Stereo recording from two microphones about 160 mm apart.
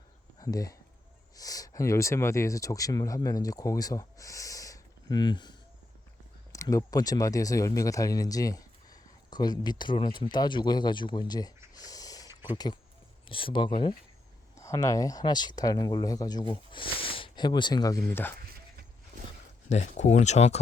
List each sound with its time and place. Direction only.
0.3 s speech: 25° left (ahead or behind)
12.3 s a sound: 15° right (ahead or behind)
13.2 s speech: 35° left (ahead or behind)
14.5 s speech: 20° left (ahead or behind)
18.1 s speech: 15° left (ahead or behind)
19.7 s speech: 45° left (ahead or behind)